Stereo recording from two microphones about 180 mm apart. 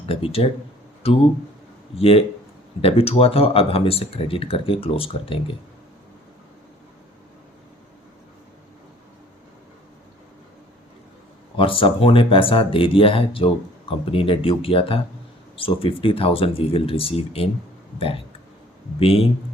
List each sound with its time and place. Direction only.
0.0 s speech: 30° left (ahead or behind)
11.5 s speech: 30° left (ahead or behind)
18.9 s speech: 30° left (ahead or behind)